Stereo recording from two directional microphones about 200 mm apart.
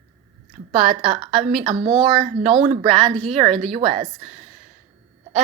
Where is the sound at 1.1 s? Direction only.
40° right (ahead or behind).